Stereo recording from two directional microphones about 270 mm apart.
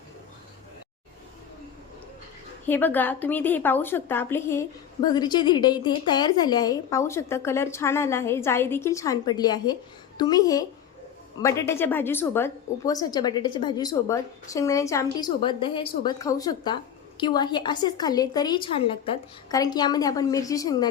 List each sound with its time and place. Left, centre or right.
2.6 s a woman's voice: centre